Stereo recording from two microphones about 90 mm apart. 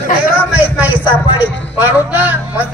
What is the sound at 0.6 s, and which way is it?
A woman's voice, 20° right (ahead or behind).